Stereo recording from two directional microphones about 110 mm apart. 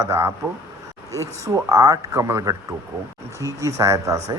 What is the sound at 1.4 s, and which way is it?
A man's voice, 30° right (ahead or behind).